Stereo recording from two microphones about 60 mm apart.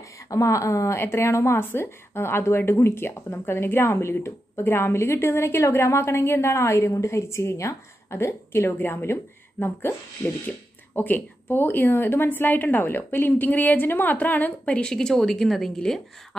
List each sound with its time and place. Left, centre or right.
0.3 s a woman's voice: left
0.9 s a woman's voice: left
14.8 s a woman's voice: centre